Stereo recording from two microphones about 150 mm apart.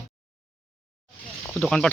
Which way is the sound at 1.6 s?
5° left (ahead or behind).